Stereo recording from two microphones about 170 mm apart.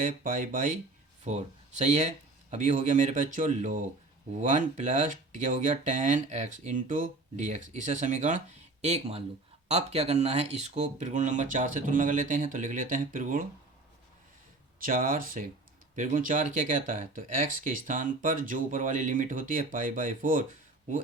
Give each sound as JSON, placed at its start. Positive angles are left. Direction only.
{"t": 0.0, "sound": "speech", "side_deg": -50}
{"t": 14.8, "sound": "speech", "side_deg": -55}